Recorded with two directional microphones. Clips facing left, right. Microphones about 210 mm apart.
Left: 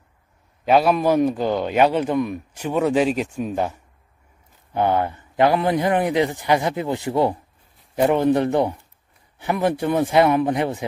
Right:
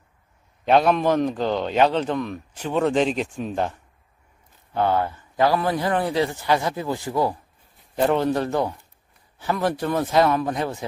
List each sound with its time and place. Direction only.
0.7 s a man's voice: 5° left (ahead or behind); by 7.3 s 25° left (ahead or behind)
7.9 s a man's voice: 15° left (ahead or behind)